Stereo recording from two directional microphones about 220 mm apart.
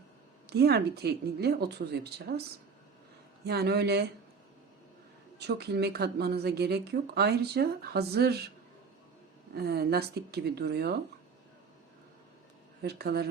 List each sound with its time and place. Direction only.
0.4 s speech: 45° right (ahead or behind)
3.4 s speech: 45° right (ahead or behind)
5.4 s speech: 50° right (ahead or behind)
9.6 s speech: 45° right (ahead or behind)
12.8 s speech: 45° right (ahead or behind)